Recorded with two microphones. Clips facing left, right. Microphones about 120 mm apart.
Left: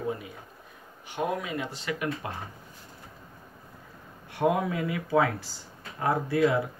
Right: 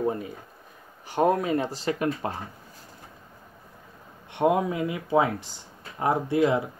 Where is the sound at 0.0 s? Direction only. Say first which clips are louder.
Right 5 dB; 40° right (ahead or behind).